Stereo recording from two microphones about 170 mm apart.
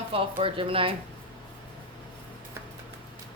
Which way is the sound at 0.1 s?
35° right (ahead or behind).